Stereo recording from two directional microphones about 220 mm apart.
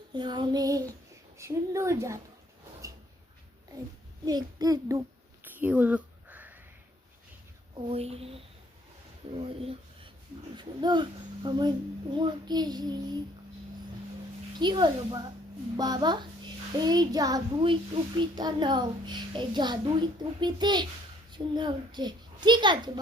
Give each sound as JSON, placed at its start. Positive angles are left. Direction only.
{"t": 0.1, "sound": "a woman's voice", "side_deg": -20}
{"t": 4.3, "sound": "a sound", "side_deg": -15}
{"t": 7.8, "sound": "a child's voice", "side_deg": -25}
{"t": 14.6, "sound": "a child's voice", "side_deg": -20}